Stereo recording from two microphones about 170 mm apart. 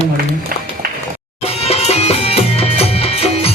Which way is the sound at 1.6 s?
40° left (ahead or behind).